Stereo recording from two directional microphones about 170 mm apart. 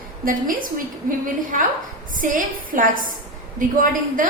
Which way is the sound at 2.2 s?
50° right (ahead or behind).